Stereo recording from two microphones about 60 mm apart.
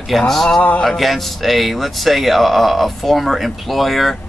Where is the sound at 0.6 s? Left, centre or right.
Left.